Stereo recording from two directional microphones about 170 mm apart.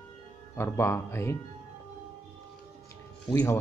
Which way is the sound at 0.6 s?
15° left (ahead or behind).